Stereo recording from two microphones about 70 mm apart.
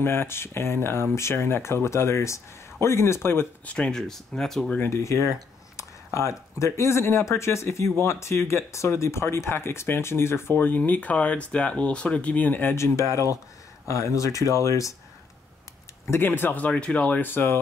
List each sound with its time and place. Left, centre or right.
0.0 s speech: left
3.6 s speech: centre
4.8 s speech: left
12.7 s speech: left
16.1 s speech: left